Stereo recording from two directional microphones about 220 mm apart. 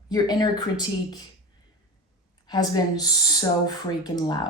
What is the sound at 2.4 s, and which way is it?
Speech, 20° left (ahead or behind).